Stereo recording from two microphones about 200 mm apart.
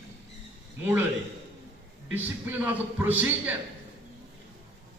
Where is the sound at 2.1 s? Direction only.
10° right (ahead or behind).